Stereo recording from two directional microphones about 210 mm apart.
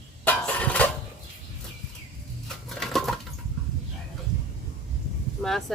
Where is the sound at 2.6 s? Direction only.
Centre (ahead or behind).